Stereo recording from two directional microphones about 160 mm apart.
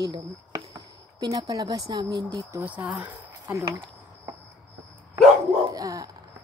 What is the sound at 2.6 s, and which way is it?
Speech, 10° right (ahead or behind).